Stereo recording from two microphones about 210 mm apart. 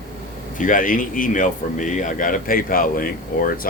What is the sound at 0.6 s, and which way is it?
Speech, 40° left (ahead or behind).